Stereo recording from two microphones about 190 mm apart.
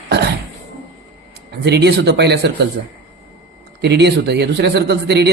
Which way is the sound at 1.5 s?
60° right (ahead or behind).